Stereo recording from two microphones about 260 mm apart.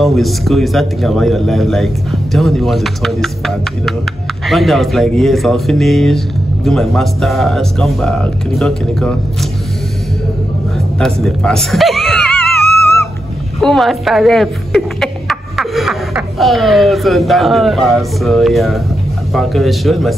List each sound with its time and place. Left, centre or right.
0.0 s speech: centre
11.0 s speech: centre
13.6 s speech: centre